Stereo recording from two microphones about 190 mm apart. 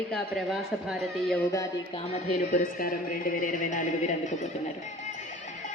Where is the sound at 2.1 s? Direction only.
40° left (ahead or behind).